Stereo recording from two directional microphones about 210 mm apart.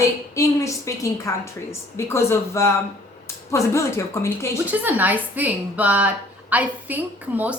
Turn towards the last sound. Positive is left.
turn(degrees=-10)  # may be behind; listen again after turning